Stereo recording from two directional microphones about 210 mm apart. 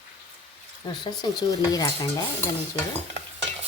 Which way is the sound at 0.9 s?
20° left (ahead or behind).